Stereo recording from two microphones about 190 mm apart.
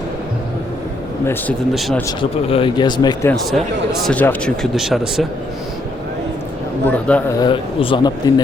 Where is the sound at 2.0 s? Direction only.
30° left (ahead or behind).